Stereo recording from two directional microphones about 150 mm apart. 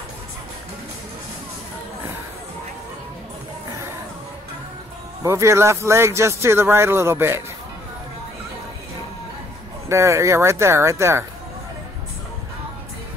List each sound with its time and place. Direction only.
5.2 s a man's voice: 20° right (ahead or behind)
9.8 s speech: 20° right (ahead or behind)